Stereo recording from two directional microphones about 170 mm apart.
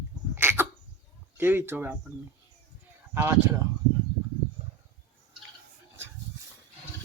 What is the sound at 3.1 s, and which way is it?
Speech, 15° right (ahead or behind).